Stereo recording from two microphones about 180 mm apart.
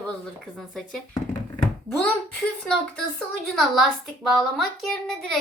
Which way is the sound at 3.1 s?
Centre (ahead or behind).